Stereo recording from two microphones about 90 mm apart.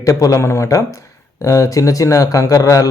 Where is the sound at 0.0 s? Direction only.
40° left (ahead or behind).